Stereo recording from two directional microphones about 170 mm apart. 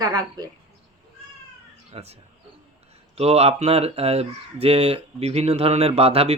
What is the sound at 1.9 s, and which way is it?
Speech, 35° right (ahead or behind).